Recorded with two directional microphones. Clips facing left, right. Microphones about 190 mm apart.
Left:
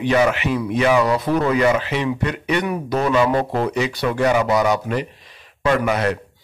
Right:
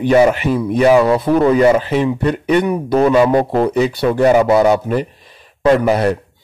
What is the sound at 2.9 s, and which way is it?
Speech, 25° right (ahead or behind).